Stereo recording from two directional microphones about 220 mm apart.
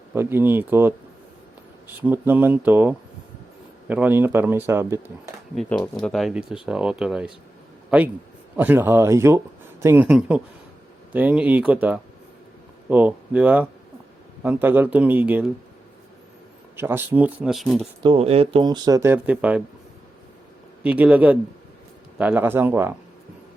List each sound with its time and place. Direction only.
0.1 s speech: 10° right (ahead or behind)
2.0 s speech: 10° right (ahead or behind)
5.5 s speech: 5° left (ahead or behind)
16.7 s speech: 10° right (ahead or behind)
18.0 s speech: 25° right (ahead or behind); by 19.6 s 5° right (ahead or behind)
20.8 s speech: 5° right (ahead or behind)